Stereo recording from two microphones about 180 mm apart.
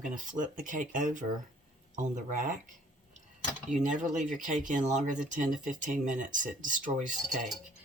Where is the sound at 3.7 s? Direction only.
40° right (ahead or behind).